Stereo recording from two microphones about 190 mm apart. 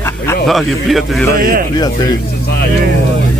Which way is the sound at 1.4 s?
50° right (ahead or behind).